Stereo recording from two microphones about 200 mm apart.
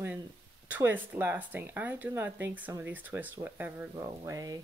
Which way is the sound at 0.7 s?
10° right (ahead or behind).